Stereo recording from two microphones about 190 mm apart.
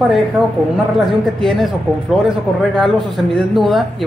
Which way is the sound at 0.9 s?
Centre (ahead or behind).